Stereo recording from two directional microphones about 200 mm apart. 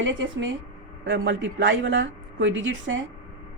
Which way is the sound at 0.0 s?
70° right (ahead or behind).